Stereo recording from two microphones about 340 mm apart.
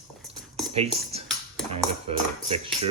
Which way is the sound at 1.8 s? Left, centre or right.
Centre.